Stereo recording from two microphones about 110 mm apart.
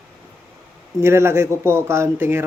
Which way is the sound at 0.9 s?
25° right (ahead or behind).